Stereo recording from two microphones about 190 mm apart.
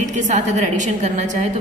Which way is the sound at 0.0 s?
40° right (ahead or behind).